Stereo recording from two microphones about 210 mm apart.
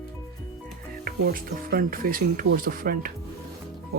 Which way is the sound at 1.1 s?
45° right (ahead or behind).